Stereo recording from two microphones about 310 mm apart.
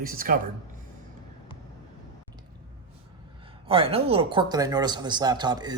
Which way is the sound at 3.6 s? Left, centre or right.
Centre.